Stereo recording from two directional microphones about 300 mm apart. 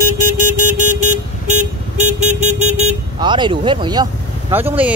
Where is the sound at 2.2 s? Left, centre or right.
Right.